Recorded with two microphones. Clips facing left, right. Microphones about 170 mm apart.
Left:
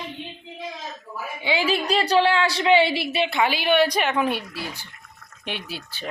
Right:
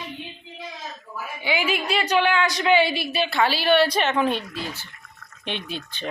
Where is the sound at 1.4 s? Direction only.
30° left (ahead or behind); by 6.0 s 10° left (ahead or behind).